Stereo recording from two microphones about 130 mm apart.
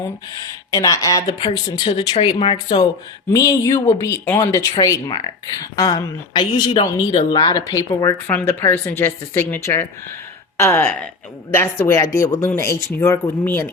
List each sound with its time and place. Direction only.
0.7 s speech: 25° left (ahead or behind)
3.3 s speech: 25° left (ahead or behind)
8.3 s a woman's voice: 15° left (ahead or behind)